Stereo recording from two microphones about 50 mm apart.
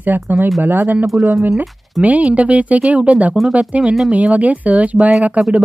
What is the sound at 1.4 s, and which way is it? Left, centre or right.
Speech, right.